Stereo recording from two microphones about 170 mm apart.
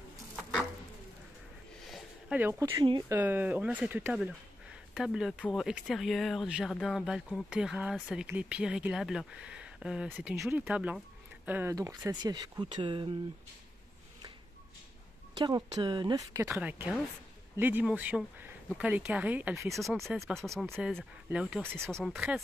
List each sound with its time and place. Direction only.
1.9 s a sound: centre (ahead or behind)
2.8 s speech: 30° right (ahead or behind)
3.1 s speech: 10° right (ahead or behind); by 13.1 s 30° right (ahead or behind)
15.3 s speech: 25° right (ahead or behind)
16.5 s speech: 10° right (ahead or behind)
19.8 s speech: centre (ahead or behind)